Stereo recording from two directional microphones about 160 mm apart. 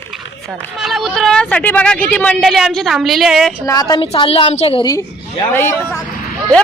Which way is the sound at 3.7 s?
25° left (ahead or behind).